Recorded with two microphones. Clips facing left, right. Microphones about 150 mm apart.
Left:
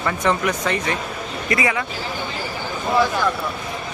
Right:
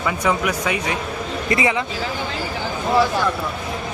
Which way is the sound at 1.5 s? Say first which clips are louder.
Right 1 dB; 25° right (ahead or behind).